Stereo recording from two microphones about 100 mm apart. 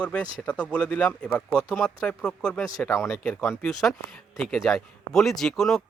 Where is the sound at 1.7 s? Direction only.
30° left (ahead or behind).